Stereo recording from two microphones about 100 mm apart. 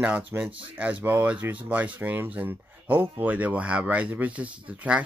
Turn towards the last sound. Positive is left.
turn(degrees=-15)  # may be behind; listen again after turning